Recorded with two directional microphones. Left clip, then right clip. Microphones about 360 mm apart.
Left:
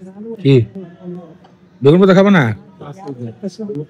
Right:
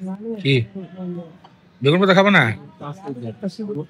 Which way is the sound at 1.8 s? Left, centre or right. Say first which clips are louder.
Left 5 dB; centre.